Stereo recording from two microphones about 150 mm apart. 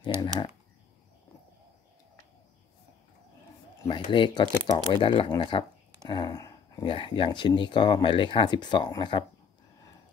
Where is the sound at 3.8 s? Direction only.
30° left (ahead or behind).